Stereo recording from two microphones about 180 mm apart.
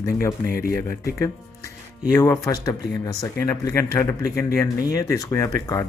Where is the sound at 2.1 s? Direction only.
20° left (ahead or behind).